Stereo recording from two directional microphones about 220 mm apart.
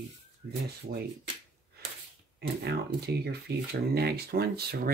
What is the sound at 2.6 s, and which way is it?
Speech, 45° right (ahead or behind).